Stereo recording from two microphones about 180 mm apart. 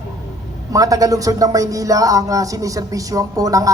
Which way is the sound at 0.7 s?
20° right (ahead or behind).